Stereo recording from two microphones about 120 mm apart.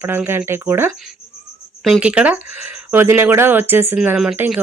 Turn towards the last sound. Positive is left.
turn(degrees=-15)  # may be behind; listen again after turning